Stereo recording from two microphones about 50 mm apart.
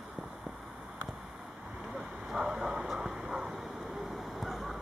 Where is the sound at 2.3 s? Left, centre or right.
Centre.